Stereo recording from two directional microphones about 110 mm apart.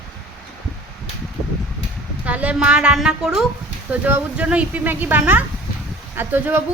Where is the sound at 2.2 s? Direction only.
15° right (ahead or behind).